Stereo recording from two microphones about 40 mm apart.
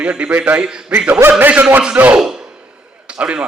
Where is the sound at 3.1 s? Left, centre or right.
Right.